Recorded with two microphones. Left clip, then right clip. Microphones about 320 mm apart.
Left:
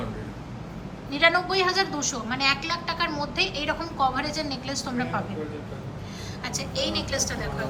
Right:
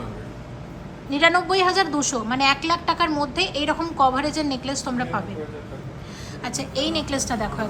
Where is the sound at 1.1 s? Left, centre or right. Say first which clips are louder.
Right 3 dB; centre.